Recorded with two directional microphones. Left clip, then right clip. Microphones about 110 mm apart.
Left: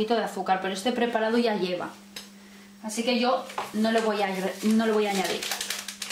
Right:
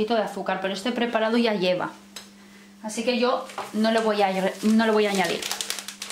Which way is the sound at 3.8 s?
40° right (ahead or behind).